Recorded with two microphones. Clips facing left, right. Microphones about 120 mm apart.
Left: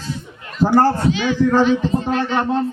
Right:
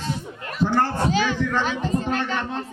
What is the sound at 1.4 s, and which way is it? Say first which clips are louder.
A man's voice: left 9 dB; 35° left (ahead or behind).